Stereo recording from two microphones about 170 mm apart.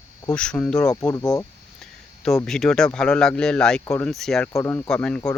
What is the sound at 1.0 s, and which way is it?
Speech, 20° left (ahead or behind).